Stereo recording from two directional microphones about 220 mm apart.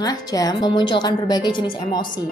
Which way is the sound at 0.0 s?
15° left (ahead or behind).